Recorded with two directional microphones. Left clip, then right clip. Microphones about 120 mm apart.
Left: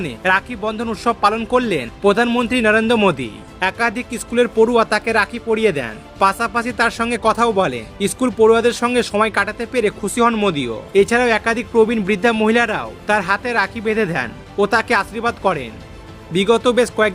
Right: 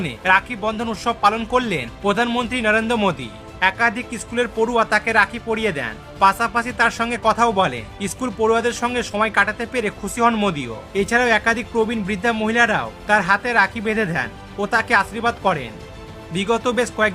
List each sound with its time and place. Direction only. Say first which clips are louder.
0.0 s speech: even; 35° left (ahead or behind)
2.3 s speech: left 4 dB; 25° left (ahead or behind)
2.6 s speech: left 4 dB; 35° left (ahead or behind)